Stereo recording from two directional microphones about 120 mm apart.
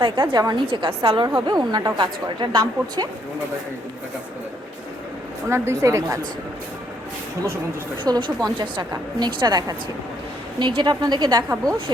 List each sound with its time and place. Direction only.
0.0 s a woman's voice: 40° right (ahead or behind)
5.5 s a woman's voice: 20° right (ahead or behind)
8.0 s a woman's voice: 35° right (ahead or behind)